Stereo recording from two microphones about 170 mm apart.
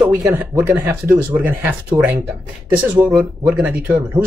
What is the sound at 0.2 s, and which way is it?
Speech, centre (ahead or behind).